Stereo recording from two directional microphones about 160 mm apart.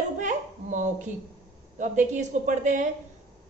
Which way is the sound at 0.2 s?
50° right (ahead or behind).